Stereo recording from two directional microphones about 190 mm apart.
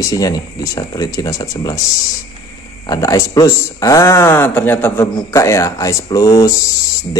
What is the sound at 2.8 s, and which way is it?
Speech, 20° left (ahead or behind).